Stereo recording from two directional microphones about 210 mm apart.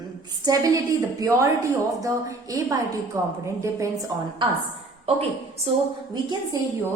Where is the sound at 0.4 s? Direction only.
15° right (ahead or behind).